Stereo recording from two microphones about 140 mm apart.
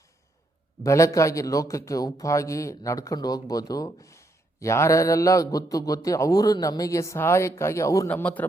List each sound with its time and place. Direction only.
0.9 s a man's voice: 20° left (ahead or behind)
8.1 s speech: 10° left (ahead or behind)